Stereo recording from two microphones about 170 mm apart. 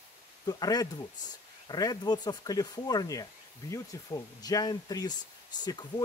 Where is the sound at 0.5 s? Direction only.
25° left (ahead or behind).